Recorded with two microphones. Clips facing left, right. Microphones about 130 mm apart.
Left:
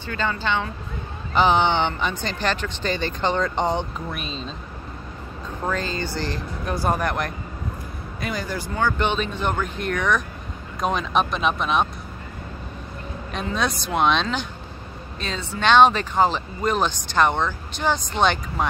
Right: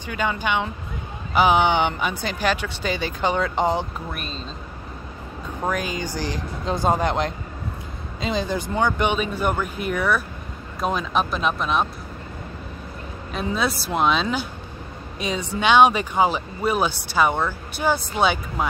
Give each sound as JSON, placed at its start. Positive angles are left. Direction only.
{"t": 0.0, "sound": "speech", "side_deg": -15}
{"t": 5.7, "sound": "speech", "side_deg": -10}
{"t": 13.3, "sound": "speech", "side_deg": -5}